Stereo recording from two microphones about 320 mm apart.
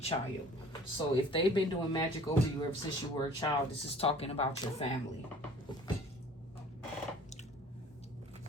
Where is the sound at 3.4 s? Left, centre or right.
Centre.